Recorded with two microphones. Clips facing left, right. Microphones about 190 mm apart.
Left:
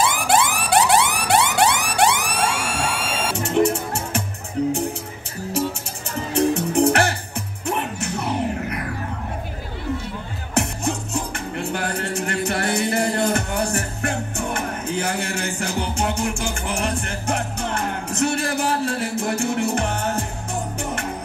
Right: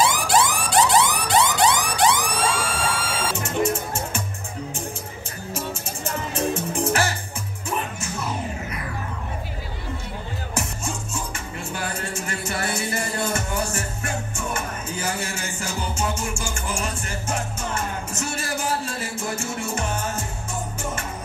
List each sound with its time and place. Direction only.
0.0 s a sound: 55° left (ahead or behind)
6.0 s music: 65° left (ahead or behind)
10.5 s music: 65° left (ahead or behind)